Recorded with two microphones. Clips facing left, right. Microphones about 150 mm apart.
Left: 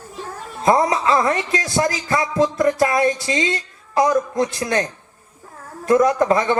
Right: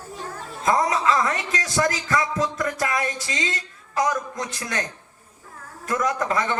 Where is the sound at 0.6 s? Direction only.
30° left (ahead or behind).